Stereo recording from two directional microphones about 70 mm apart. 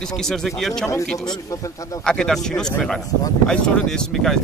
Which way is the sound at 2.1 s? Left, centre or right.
Centre.